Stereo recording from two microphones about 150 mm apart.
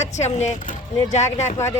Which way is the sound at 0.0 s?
50° left (ahead or behind).